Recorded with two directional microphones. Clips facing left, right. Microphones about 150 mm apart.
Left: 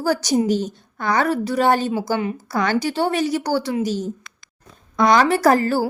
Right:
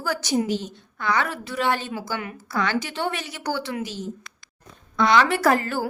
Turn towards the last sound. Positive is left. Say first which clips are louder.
# left 5 dB
turn(degrees=35)  # may be behind; listen again after turning